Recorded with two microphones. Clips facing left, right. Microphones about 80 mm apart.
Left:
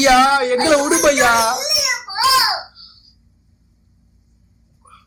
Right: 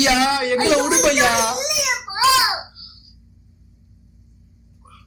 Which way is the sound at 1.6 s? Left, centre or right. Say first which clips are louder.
Even; left.